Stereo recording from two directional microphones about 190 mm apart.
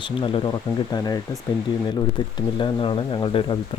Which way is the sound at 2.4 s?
25° left (ahead or behind).